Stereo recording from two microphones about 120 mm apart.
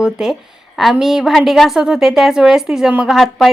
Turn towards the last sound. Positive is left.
turn(degrees=0)  # may be behind; listen again after turning